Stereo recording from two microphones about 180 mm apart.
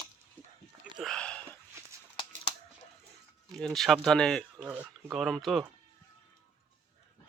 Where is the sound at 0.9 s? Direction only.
Centre (ahead or behind).